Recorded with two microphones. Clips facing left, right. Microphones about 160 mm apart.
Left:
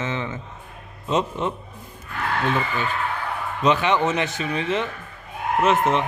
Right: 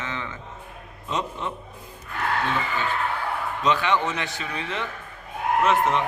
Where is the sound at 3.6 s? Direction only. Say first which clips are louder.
Left 4 dB; 20° left (ahead or behind).